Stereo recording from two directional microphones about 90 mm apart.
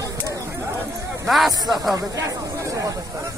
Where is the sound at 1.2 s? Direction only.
Centre (ahead or behind).